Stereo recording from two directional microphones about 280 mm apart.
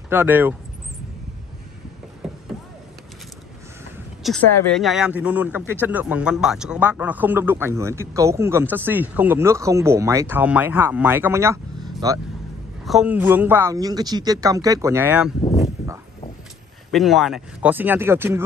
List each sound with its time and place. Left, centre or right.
0.1 s speech: centre
4.2 s speech: centre
15.4 s a sound: left
16.9 s speech: centre